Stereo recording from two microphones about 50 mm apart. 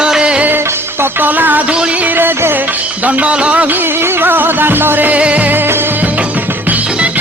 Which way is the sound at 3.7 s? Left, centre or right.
Right.